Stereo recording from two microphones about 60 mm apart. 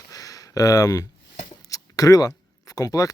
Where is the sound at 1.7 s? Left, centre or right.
Left.